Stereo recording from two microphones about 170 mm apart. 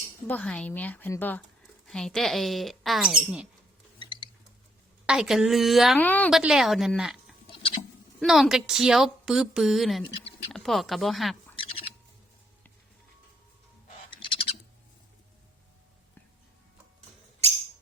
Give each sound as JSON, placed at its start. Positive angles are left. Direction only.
{"t": 0.3, "sound": "a woman's voice", "side_deg": 10}
{"t": 4.0, "sound": "a sound", "side_deg": 30}
{"t": 5.0, "sound": "a woman's voice", "side_deg": -5}
{"t": 6.0, "sound": "a woman's voice", "side_deg": 10}
{"t": 6.3, "sound": "a woman's voice", "side_deg": -5}
{"t": 14.1, "sound": "bird", "side_deg": 30}